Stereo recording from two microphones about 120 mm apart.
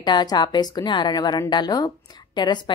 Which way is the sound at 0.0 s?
35° left (ahead or behind).